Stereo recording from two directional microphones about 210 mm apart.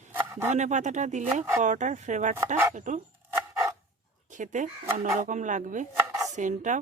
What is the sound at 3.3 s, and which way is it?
Dog, 15° right (ahead or behind).